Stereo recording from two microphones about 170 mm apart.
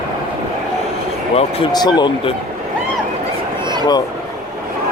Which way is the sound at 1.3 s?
25° left (ahead or behind).